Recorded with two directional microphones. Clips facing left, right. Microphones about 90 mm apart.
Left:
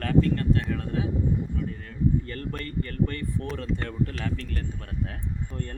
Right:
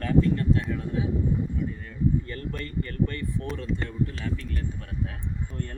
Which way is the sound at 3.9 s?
65° left (ahead or behind).